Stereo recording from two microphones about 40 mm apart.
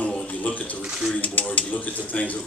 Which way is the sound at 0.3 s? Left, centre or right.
Left.